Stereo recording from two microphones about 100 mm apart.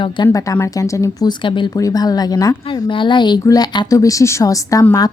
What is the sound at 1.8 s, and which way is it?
Speech, 35° left (ahead or behind).